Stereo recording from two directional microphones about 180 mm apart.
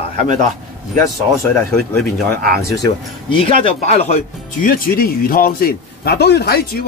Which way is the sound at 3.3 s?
30° left (ahead or behind).